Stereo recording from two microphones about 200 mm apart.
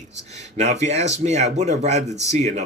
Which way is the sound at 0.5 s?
35° right (ahead or behind).